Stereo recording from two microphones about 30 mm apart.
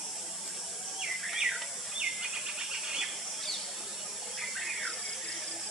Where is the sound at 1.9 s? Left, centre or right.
Right.